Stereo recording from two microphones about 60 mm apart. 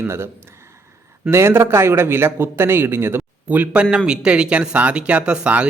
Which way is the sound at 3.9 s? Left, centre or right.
Centre.